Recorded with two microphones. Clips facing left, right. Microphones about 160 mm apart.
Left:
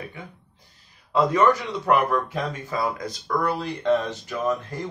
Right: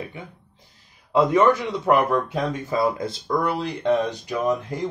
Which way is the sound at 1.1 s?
20° right (ahead or behind).